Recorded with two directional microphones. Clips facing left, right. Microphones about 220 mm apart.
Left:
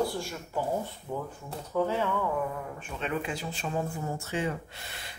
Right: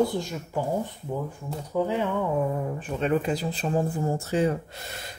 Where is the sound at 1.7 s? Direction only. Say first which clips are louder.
Right 2 dB; 15° right (ahead or behind).